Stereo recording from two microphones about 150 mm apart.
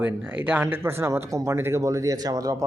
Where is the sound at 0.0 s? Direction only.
10° right (ahead or behind).